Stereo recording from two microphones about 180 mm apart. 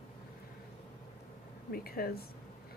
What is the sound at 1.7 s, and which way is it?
Speech, 55° left (ahead or behind).